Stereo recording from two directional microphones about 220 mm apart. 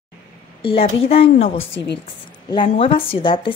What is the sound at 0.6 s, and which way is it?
A woman's voice, 25° left (ahead or behind).